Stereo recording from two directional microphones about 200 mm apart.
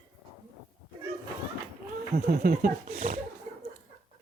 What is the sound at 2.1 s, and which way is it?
Speech, 50° right (ahead or behind).